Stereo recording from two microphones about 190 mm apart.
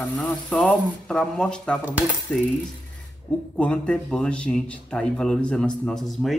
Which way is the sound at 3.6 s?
5° left (ahead or behind).